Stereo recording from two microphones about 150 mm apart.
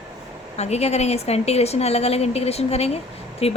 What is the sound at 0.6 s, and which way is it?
A woman's voice, 45° left (ahead or behind).